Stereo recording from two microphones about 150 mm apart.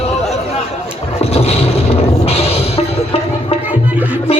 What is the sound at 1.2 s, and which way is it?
Music, 45° left (ahead or behind).